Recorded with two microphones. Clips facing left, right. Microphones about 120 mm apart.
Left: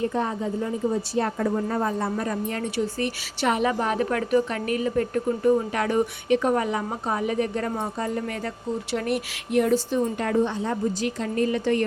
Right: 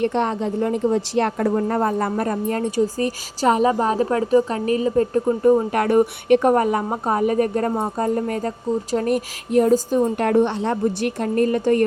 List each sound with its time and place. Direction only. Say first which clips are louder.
0.0 s a woman's voice: right 5 dB; 75° right (ahead or behind)
1.5 s a woman's voice: right 5 dB; 50° right (ahead or behind); by 5.5 s 30° right (ahead or behind)
5.5 s speech: right 5 dB; 45° right (ahead or behind)